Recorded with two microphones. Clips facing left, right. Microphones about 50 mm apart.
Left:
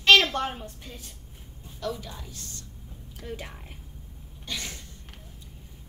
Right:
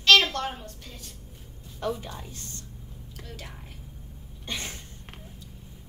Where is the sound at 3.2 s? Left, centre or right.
Centre.